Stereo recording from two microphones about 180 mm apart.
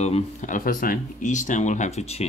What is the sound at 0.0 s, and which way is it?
Speech, 40° left (ahead or behind).